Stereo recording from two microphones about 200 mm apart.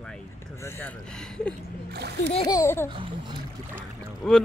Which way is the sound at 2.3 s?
25° left (ahead or behind).